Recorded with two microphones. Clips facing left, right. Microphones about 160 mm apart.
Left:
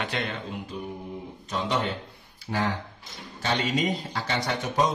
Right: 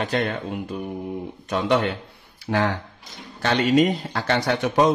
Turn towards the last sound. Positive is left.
turn(degrees=-70)  # may be behind; listen again after turning